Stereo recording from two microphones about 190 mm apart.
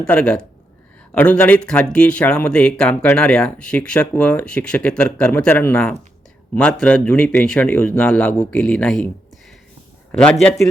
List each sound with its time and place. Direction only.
0.0 s a man's voice: 5° left (ahead or behind)
10.1 s speech: 5° left (ahead or behind)